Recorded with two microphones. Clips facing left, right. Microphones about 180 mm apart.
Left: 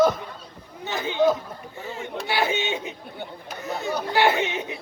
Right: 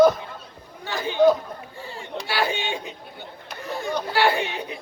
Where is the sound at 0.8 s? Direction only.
20° left (ahead or behind).